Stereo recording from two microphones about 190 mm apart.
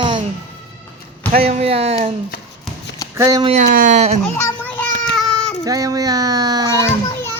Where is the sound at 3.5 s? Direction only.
40° right (ahead or behind).